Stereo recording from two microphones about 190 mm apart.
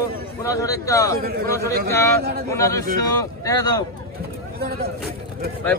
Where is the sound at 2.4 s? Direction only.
15° left (ahead or behind).